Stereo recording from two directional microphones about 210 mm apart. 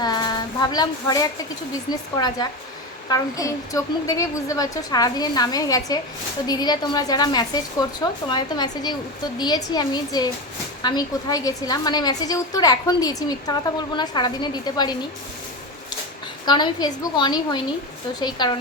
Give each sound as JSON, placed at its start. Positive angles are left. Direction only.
{"t": 0.0, "sound": "a sound", "side_deg": 20}
{"t": 2.1, "sound": "a woman's voice", "side_deg": 20}
{"t": 16.5, "sound": "a woman's voice", "side_deg": 20}